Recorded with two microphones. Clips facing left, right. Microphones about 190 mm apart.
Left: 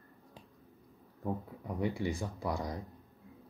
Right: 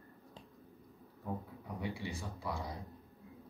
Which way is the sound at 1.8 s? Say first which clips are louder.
Left 8 dB; 50° left (ahead or behind).